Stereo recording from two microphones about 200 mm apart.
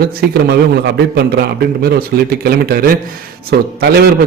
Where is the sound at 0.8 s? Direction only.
50° right (ahead or behind).